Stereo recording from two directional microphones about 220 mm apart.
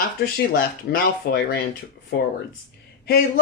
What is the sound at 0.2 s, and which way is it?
Speech, 45° left (ahead or behind).